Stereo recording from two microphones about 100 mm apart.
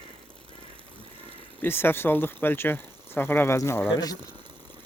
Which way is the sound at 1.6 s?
25° left (ahead or behind).